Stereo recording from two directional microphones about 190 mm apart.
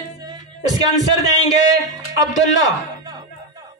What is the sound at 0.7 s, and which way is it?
Speech, 20° right (ahead or behind).